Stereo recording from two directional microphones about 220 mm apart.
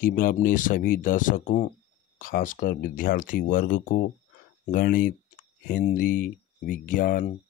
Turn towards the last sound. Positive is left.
turn(degrees=40)  # may be behind; listen again after turning